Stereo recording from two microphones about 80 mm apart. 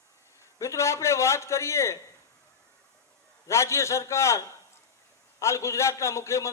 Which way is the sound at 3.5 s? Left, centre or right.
Left.